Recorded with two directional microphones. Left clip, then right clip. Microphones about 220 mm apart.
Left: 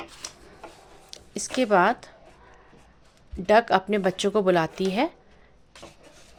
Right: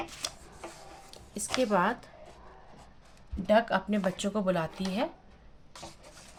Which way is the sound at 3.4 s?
40° left (ahead or behind).